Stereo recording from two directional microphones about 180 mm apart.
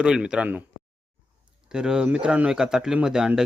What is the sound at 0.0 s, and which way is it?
Speech, 5° right (ahead or behind).